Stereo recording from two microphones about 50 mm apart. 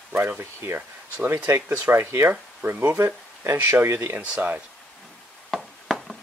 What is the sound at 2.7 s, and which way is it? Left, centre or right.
Speech, right.